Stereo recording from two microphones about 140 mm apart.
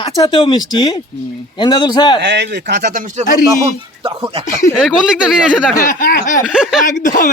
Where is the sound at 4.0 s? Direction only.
40° right (ahead or behind).